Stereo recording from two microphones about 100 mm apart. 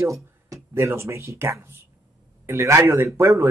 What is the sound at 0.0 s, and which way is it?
A man's voice, 30° right (ahead or behind).